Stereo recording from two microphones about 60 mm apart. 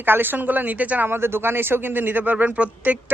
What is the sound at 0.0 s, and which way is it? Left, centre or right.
Speech, right.